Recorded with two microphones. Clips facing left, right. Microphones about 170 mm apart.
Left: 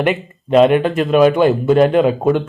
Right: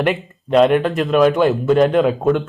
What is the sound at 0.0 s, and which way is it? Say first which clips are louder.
Speech: left 2 dB; centre (ahead or behind).